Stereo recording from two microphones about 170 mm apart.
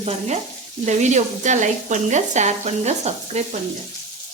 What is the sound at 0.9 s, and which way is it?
Speech, 45° right (ahead or behind).